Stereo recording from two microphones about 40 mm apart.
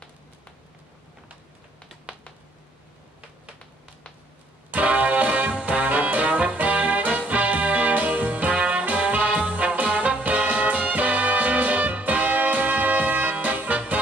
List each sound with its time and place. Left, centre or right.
4.6 s music: right